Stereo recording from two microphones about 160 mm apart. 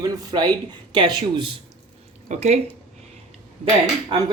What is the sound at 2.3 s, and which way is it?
Speech, 45° right (ahead or behind).